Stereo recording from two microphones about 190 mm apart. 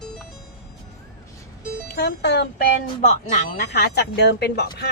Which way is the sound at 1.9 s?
60° left (ahead or behind).